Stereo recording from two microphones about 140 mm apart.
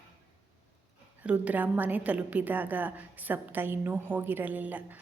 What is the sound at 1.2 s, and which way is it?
A woman's voice, 10° right (ahead or behind).